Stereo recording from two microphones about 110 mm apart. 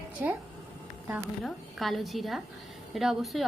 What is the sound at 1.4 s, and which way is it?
A woman's voice, centre (ahead or behind).